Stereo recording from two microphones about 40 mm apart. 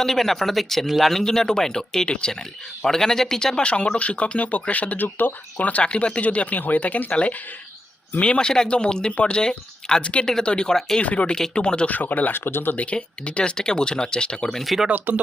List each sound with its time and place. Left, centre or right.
0.0 s speech: centre
3.6 s speech: left
5.0 s speech: left
5.5 s speech: left; by 10.0 s centre
10.0 s speech: left
10.7 s speech: centre
11.0 s speech: left
11.3 s speech: centre
11.9 s speech: left
12.3 s speech: left
12.7 s speech: left
14.5 s speech: centre
15.1 s speech: right